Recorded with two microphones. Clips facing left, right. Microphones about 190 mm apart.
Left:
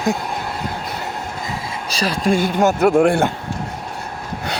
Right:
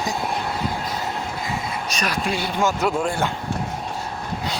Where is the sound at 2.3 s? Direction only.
45° left (ahead or behind).